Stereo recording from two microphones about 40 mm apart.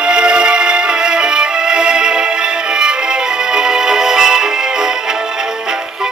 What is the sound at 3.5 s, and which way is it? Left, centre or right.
Music, centre.